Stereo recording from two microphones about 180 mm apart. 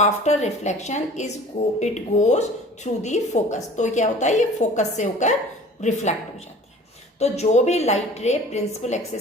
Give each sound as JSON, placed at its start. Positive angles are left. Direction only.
{"t": 0.0, "sound": "a woman's voice", "side_deg": 40}
{"t": 7.2, "sound": "a woman's voice", "side_deg": 40}